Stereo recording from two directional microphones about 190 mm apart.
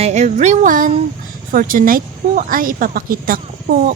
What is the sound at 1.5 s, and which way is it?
Speech, 45° right (ahead or behind).